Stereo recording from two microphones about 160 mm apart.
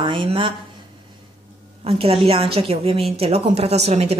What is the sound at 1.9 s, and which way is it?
A woman's voice, 35° right (ahead or behind).